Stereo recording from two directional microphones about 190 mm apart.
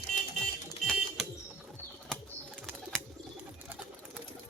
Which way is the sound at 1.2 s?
Centre (ahead or behind).